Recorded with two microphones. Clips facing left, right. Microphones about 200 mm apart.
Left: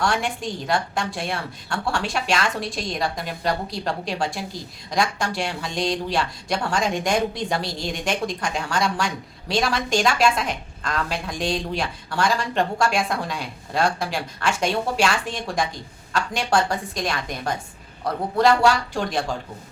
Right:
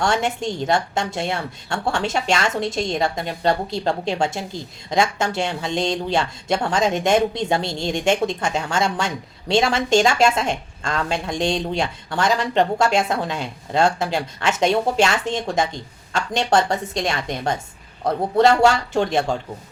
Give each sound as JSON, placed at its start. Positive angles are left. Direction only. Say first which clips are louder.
{"t": 0.0, "sound": "speech", "louder": "right 3 dB", "side_deg": -25}